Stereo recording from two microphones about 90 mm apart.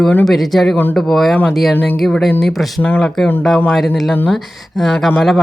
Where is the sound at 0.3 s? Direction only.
Centre (ahead or behind).